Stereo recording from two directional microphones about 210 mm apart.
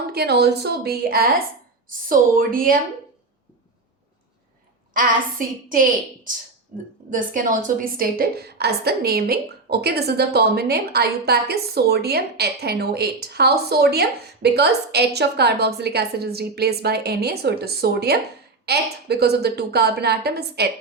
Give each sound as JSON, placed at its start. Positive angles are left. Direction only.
{"t": 0.1, "sound": "a woman's voice", "side_deg": -50}
{"t": 4.9, "sound": "a woman's voice", "side_deg": -40}